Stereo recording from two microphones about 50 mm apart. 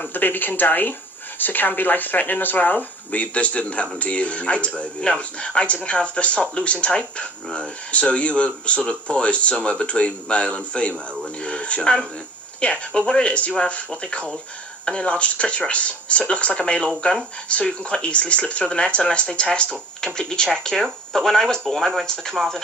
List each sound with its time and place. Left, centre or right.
0.1 s speech: left; by 22.6 s centre